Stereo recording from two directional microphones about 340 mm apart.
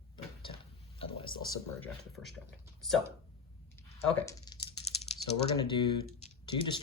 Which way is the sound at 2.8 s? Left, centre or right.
Centre.